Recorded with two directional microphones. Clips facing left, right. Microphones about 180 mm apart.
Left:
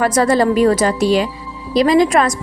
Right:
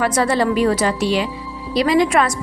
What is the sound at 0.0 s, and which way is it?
A woman's voice, 40° left (ahead or behind).